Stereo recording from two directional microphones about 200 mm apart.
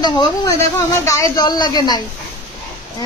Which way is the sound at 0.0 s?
20° left (ahead or behind).